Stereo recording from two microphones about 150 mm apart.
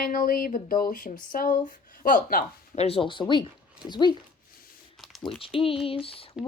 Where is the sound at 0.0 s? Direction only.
70° left (ahead or behind).